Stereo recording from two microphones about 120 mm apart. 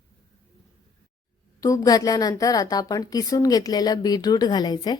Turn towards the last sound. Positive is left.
turn(degrees=35)  # may be behind; listen again after turning